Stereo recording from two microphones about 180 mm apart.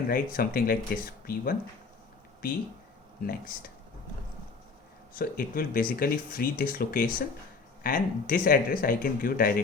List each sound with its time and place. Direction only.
0.1 s speech: 55° left (ahead or behind)
3.2 s speech: 55° left (ahead or behind)
5.1 s speech: 55° left (ahead or behind)